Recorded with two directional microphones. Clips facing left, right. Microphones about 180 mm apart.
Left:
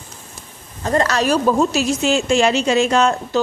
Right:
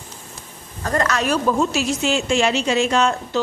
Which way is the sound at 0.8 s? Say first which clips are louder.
Left 3 dB; 25° left (ahead or behind).